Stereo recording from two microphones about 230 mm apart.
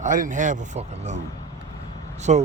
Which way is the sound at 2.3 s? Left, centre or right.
Right.